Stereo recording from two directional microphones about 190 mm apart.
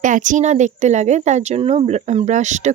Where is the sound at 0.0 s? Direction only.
40° right (ahead or behind).